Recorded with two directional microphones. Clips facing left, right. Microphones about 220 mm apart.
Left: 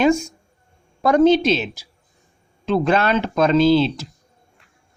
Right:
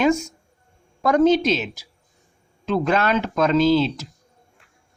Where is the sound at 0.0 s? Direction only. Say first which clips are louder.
Left 2 dB; 30° left (ahead or behind).